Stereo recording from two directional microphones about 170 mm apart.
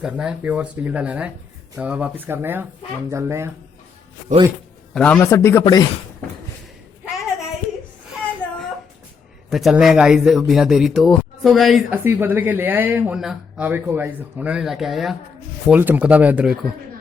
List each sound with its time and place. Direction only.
0.0 s speech: 5° right (ahead or behind)
4.9 s a man's voice: 5° left (ahead or behind); by 5.9 s 25° left (ahead or behind)
9.5 s a man's voice: centre (ahead or behind)
12.0 s speech: 10° right (ahead or behind)